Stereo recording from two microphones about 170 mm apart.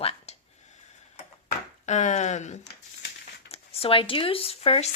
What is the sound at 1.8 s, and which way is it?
Speech, 45° left (ahead or behind).